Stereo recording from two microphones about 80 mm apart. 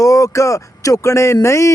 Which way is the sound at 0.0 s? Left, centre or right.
Left.